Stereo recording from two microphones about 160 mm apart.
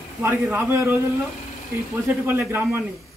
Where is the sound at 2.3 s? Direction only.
15° right (ahead or behind).